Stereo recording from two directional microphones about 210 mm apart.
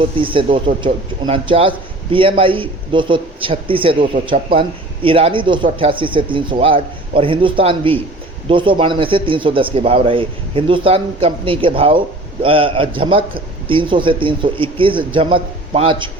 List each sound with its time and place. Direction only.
0.2 s speech: 25° right (ahead or behind)